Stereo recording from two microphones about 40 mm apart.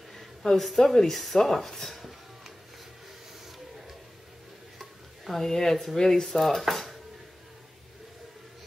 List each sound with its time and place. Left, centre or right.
0.1 s speech: centre
4.7 s stir: centre
5.4 s speech: centre